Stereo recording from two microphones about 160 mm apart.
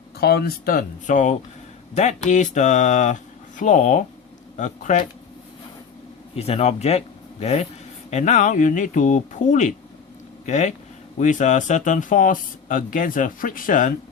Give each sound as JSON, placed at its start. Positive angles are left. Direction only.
{"t": 0.2, "sound": "speech", "side_deg": 85}
{"t": 6.3, "sound": "speech", "side_deg": 40}